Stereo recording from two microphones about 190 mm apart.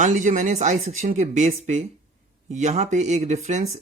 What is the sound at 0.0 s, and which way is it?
Speech, 40° right (ahead or behind).